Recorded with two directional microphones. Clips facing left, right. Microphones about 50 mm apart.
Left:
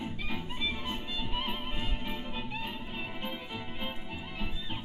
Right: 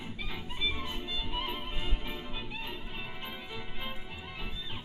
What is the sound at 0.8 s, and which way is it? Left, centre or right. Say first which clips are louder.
Music: left 1 dB; centre.